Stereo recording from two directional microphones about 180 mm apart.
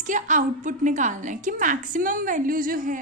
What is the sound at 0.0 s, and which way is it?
A woman's voice, 45° right (ahead or behind).